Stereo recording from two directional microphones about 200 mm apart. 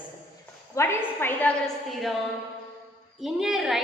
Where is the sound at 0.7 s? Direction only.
15° left (ahead or behind).